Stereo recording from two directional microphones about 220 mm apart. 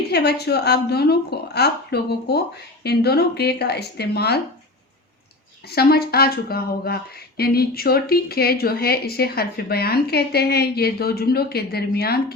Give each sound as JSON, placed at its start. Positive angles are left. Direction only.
{"t": 0.1, "sound": "speech", "side_deg": 50}
{"t": 5.6, "sound": "speech", "side_deg": 45}